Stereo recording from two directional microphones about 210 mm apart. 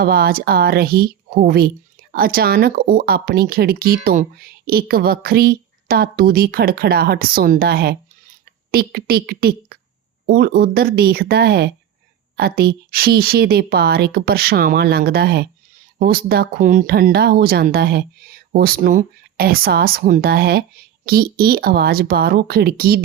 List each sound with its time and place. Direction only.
0.0 s speech: 45° right (ahead or behind)